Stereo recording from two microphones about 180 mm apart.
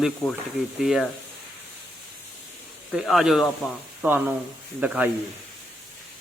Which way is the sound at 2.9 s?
Centre (ahead or behind).